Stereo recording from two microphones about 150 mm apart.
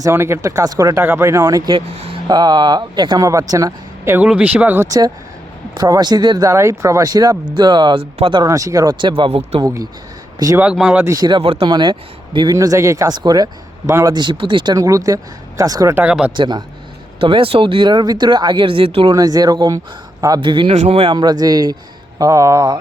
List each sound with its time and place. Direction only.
0.0 s speech: 15° right (ahead or behind)
4.9 s speech: 25° right (ahead or behind)
8.4 s speech: 20° right (ahead or behind); by 9.6 s 35° right (ahead or behind)
10.6 s speech: 5° right (ahead or behind)
11.0 s speech: 25° right (ahead or behind)
16.0 s speech: 10° right (ahead or behind)
16.3 s speech: 30° right (ahead or behind)
19.1 s speech: 25° right (ahead or behind)
20.7 s speech: 45° right (ahead or behind); by 22.8 s 20° right (ahead or behind)